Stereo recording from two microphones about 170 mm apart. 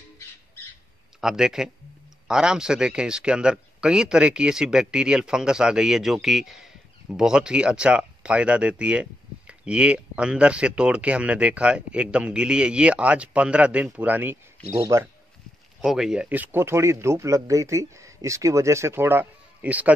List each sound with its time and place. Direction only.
1.2 s speech: 5° right (ahead or behind)
15.8 s speech: 5° right (ahead or behind)